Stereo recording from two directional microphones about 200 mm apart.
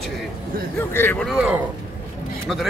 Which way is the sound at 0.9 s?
10° left (ahead or behind).